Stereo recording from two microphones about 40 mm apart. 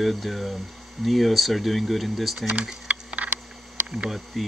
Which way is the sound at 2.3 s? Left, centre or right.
Right.